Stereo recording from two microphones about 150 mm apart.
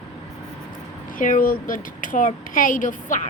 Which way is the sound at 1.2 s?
65° left (ahead or behind).